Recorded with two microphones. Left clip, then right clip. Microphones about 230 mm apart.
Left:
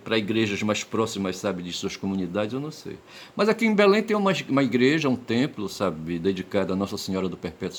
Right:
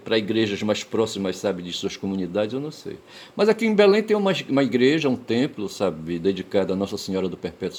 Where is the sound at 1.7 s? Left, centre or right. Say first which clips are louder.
Right 2 dB; left.